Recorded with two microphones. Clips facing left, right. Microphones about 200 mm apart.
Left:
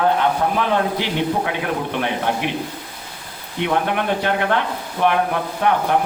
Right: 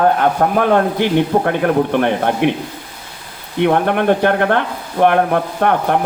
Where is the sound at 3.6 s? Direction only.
50° right (ahead or behind).